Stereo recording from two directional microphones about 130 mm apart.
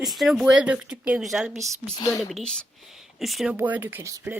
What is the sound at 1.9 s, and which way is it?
Speech, 25° left (ahead or behind).